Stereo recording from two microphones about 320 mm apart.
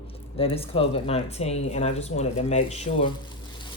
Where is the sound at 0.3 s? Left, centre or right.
Centre.